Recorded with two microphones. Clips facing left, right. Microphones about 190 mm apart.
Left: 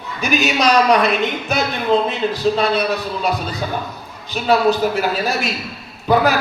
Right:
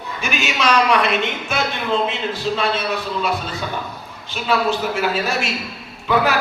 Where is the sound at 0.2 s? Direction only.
40° left (ahead or behind).